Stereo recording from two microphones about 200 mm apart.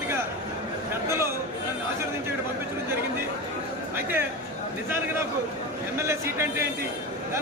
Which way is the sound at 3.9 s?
10° right (ahead or behind).